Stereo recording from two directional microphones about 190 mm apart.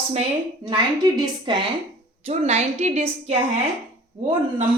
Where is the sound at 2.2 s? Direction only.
35° right (ahead or behind).